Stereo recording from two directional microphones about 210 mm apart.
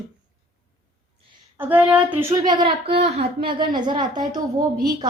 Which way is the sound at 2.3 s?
20° right (ahead or behind).